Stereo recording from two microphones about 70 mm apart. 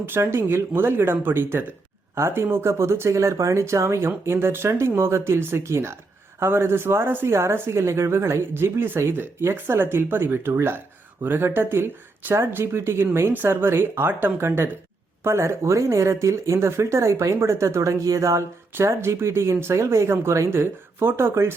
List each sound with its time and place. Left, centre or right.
0.0 s speech: right